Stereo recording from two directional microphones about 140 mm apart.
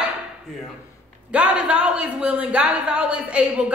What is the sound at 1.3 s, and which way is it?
Speech, 10° right (ahead or behind).